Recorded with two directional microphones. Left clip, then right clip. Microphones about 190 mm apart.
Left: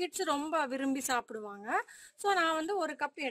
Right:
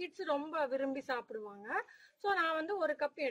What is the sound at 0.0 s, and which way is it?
A woman's voice, 65° left (ahead or behind).